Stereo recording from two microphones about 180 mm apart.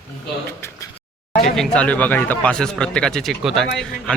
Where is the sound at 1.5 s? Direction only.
5° left (ahead or behind).